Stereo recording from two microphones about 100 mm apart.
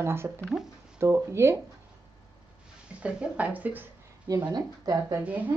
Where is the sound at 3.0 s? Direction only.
15° right (ahead or behind).